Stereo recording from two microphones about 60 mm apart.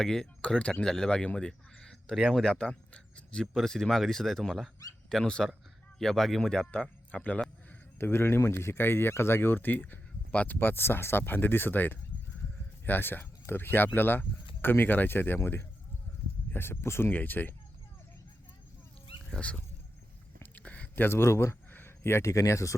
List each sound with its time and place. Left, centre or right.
0.0 s speech: centre
5.0 s speech: centre
7.1 s a man's voice: left
7.9 s speech: left
16.5 s speech: left
17.1 s speech: left
19.4 s a man's voice: left
20.4 s a sound: left
20.9 s speech: left